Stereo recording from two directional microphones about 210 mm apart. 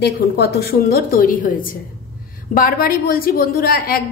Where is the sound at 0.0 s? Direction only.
50° left (ahead or behind).